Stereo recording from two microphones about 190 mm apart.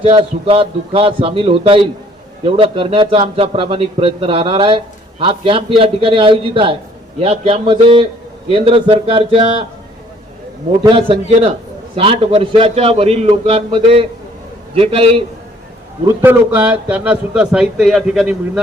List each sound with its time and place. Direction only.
0.0 s a man's voice: 30° right (ahead or behind)
10.8 s a man's voice: 30° right (ahead or behind)
16.2 s a man's voice: 10° right (ahead or behind)